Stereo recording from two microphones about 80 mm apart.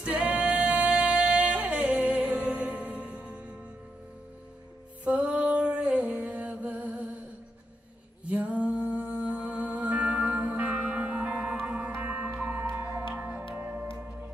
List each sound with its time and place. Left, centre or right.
0.0 s music: centre
5.0 s music: centre
8.3 s music: centre